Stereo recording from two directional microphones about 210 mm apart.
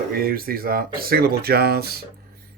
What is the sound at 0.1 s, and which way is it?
Speech, 45° right (ahead or behind).